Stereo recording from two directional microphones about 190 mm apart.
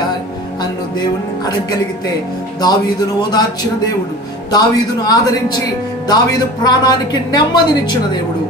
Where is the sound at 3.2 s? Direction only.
20° left (ahead or behind).